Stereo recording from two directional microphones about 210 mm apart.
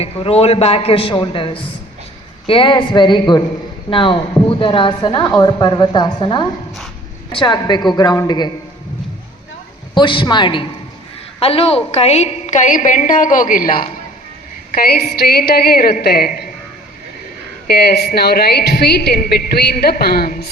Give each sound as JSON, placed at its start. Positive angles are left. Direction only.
{"t": 0.0, "sound": "speech", "side_deg": 30}
{"t": 9.9, "sound": "a woman's voice", "side_deg": 25}
{"t": 17.7, "sound": "a woman's voice", "side_deg": 50}